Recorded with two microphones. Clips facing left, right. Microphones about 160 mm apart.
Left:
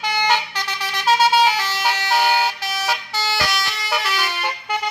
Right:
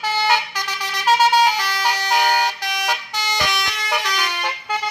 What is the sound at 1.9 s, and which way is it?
Vehicle, 15° right (ahead or behind).